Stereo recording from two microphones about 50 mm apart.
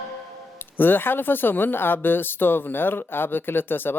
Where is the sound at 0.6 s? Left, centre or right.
Left.